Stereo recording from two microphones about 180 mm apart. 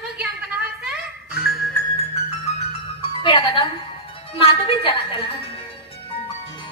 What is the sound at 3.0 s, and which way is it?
Music, 30° left (ahead or behind).